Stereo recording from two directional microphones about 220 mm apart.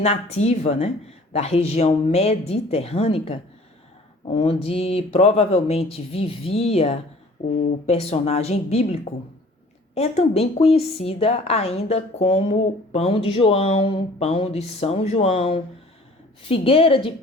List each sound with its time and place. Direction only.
0.0 s speech: 30° left (ahead or behind)
4.4 s speech: 25° left (ahead or behind)